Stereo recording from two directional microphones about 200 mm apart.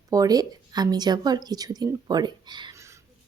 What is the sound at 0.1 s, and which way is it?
Speech, 20° right (ahead or behind).